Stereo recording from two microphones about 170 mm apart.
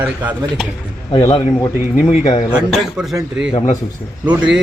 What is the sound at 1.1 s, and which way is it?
Speech, 35° left (ahead or behind).